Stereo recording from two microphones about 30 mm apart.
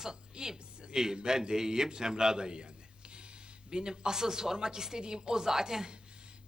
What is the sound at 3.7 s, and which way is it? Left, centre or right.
Speech, right.